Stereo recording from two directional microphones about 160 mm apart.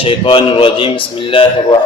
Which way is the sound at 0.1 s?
35° left (ahead or behind).